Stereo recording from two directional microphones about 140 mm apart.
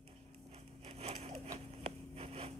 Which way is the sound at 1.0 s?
50° right (ahead or behind).